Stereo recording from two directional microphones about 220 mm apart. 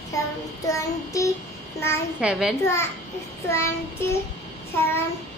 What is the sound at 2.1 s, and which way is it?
Speech, 5° right (ahead or behind).